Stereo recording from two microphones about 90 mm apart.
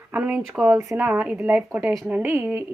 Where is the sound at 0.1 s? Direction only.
15° right (ahead or behind).